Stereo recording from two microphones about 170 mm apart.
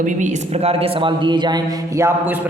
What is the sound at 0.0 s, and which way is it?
A man's voice, 40° right (ahead or behind).